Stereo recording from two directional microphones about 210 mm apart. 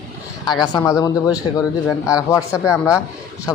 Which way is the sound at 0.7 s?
15° left (ahead or behind).